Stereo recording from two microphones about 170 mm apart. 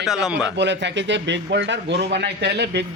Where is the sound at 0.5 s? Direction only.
90° right.